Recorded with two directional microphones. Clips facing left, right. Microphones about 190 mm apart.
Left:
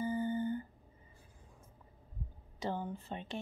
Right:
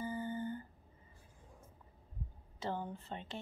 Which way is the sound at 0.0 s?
15° left (ahead or behind).